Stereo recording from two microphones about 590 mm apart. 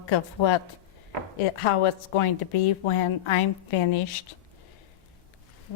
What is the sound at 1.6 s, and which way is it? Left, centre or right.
A woman's voice, left.